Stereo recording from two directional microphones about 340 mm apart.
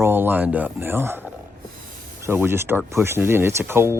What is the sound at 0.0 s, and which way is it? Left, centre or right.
Speech, centre.